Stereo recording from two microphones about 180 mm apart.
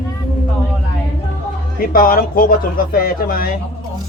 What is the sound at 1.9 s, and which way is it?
Speech, 50° left (ahead or behind).